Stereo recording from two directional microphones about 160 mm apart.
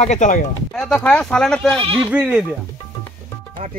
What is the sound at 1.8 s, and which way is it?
Speech, 35° right (ahead or behind).